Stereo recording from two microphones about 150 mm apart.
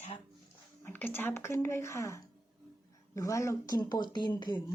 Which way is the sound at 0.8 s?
15° left (ahead or behind).